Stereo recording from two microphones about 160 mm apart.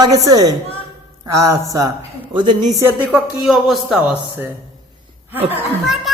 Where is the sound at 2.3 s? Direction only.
30° right (ahead or behind).